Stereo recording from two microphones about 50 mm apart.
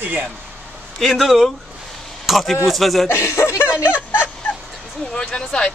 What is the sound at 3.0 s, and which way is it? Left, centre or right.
Chuckle, left.